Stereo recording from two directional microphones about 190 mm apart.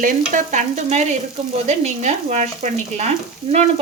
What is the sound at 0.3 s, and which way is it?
Speech, 40° right (ahead or behind).